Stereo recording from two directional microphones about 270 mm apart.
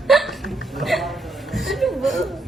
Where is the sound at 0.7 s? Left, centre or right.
Centre.